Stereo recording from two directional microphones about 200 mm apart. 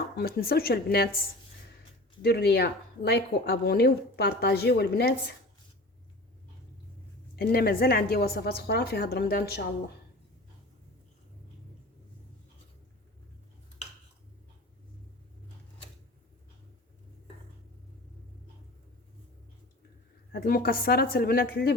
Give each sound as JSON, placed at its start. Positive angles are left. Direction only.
{"t": 0.2, "sound": "a woman's voice", "side_deg": 50}
{"t": 2.2, "sound": "a woman's voice", "side_deg": 55}
{"t": 7.3, "sound": "a woman's voice", "side_deg": 50}
{"t": 20.3, "sound": "a woman's voice", "side_deg": 45}